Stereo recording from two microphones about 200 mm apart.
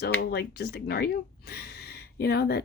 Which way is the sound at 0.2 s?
55° left (ahead or behind).